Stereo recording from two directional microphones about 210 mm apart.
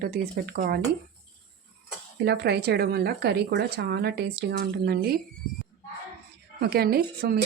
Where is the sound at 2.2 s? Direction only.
50° right (ahead or behind).